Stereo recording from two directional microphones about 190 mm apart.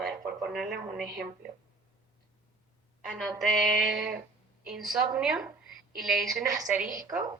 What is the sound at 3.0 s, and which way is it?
A woman's voice, centre (ahead or behind).